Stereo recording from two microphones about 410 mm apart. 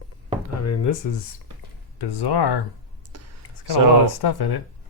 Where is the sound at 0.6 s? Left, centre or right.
Left.